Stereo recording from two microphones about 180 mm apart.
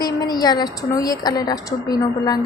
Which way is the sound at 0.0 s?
20° left (ahead or behind).